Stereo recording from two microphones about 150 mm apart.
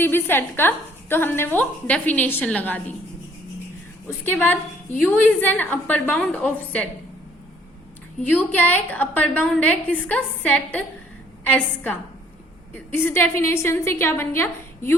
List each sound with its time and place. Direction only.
0.0 s a woman's voice: 15° left (ahead or behind)
4.3 s a woman's voice: 10° left (ahead or behind)
8.3 s a woman's voice: 10° left (ahead or behind)